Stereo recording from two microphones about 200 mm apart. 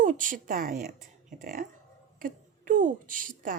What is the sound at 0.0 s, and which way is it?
A woman's voice, 40° right (ahead or behind).